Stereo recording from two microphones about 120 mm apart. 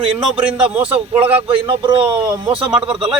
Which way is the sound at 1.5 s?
45° right (ahead or behind).